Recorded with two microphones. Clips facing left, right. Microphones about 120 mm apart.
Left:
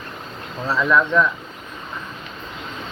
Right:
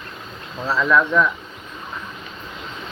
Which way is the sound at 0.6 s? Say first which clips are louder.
Even; centre (ahead or behind).